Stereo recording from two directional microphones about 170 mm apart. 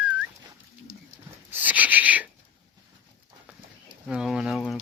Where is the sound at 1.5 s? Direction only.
10° right (ahead or behind).